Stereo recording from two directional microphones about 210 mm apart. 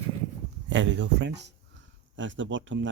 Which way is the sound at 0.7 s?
60° right (ahead or behind).